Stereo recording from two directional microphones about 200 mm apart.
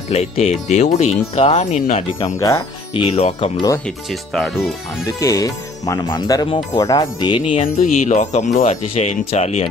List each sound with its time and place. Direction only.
0.1 s speech: 35° left (ahead or behind)
2.2 s speech: 15° left (ahead or behind)
3.0 s speech: 30° left (ahead or behind)
4.1 s speech: centre (ahead or behind)
5.0 s speech: 15° left (ahead or behind)
7.6 s speech: 40° left (ahead or behind)